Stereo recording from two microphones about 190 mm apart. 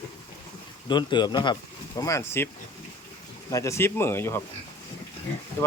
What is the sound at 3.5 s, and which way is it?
Speech, 15° left (ahead or behind).